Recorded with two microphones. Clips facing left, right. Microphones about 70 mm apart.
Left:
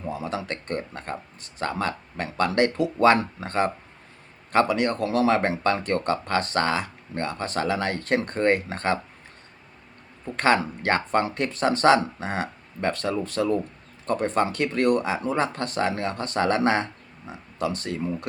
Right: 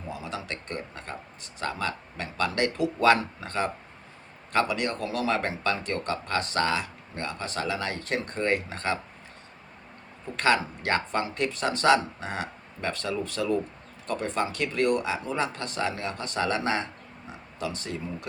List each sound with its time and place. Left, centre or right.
0.1 s speech: left
10.3 s speech: left